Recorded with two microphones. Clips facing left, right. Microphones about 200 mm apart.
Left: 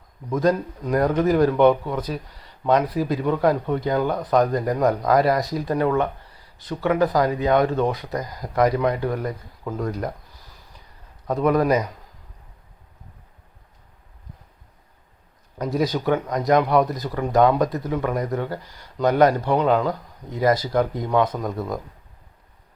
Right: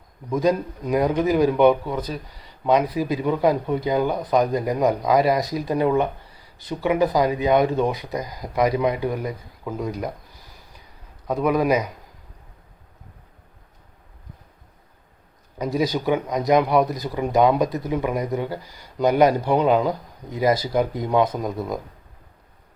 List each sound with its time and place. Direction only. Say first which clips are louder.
0.4 s speech: left 1 dB; 10° right (ahead or behind)
5.7 s speech: right 1 dB; 15° right (ahead or behind)
11.3 s speech: left 1 dB; 5° right (ahead or behind)
15.6 s speech: even; centre (ahead or behind)